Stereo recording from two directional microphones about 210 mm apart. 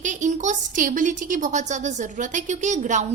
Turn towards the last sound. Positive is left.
turn(degrees=-35)  # may be behind; listen again after turning